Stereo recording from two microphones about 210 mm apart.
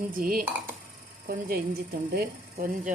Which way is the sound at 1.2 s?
45° right (ahead or behind).